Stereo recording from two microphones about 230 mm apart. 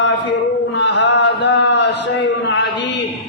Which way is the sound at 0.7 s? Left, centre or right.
Left.